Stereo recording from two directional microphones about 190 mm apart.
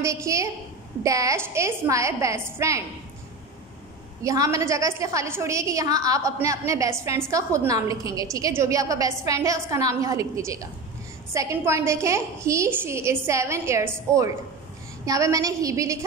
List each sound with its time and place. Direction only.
0.0 s a woman's voice: 15° right (ahead or behind)
4.2 s a woman's voice: 15° right (ahead or behind)